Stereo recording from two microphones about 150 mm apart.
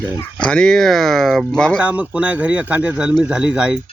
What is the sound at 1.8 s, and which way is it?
Speech, 10° right (ahead or behind).